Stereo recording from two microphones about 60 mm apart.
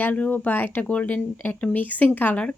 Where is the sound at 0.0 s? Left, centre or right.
Left.